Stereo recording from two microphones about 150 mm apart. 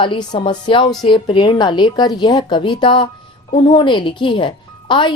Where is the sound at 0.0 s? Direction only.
30° left (ahead or behind).